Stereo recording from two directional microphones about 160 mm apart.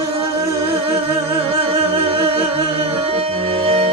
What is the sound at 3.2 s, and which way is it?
Music, 35° right (ahead or behind).